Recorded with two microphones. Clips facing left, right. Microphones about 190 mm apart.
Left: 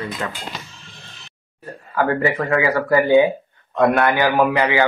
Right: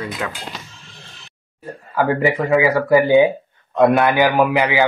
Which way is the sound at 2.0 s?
20° right (ahead or behind).